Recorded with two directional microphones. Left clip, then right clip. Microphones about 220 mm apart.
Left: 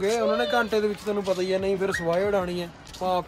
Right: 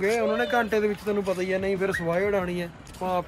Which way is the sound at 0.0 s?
15° left (ahead or behind).